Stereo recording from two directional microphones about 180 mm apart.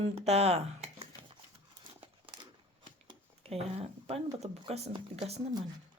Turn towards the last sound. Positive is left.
turn(degrees=-35)  # may be behind; listen again after turning